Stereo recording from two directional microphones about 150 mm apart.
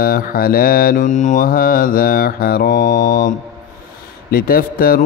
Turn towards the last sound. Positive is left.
turn(degrees=75)  # may be behind; listen again after turning